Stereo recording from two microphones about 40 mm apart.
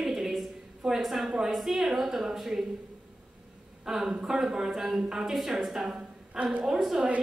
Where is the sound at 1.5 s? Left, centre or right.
Centre.